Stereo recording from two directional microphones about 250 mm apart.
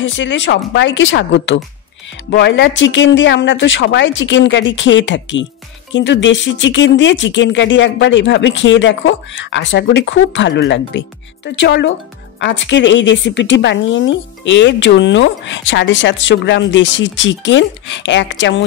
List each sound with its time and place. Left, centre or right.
0.0 s a woman's voice: left